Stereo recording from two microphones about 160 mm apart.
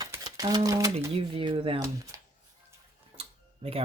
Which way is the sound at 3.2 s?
35° right (ahead or behind).